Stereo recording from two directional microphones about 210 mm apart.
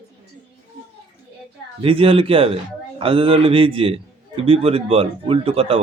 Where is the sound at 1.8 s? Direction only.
25° right (ahead or behind).